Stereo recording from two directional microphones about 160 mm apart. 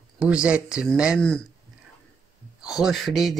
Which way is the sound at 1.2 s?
5° left (ahead or behind).